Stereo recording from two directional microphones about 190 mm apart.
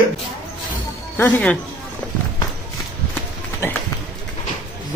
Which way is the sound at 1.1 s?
10° left (ahead or behind).